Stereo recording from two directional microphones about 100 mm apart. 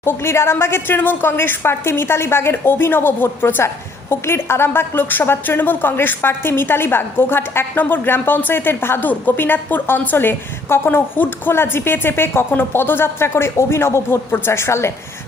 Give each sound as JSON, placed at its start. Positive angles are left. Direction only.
{"t": 0.0, "sound": "a woman's voice", "side_deg": 25}